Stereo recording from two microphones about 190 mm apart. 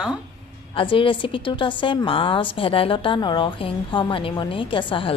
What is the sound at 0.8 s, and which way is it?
A woman's voice, 25° left (ahead or behind).